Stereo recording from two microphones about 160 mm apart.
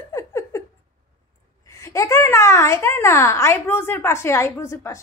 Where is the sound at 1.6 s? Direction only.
20° left (ahead or behind).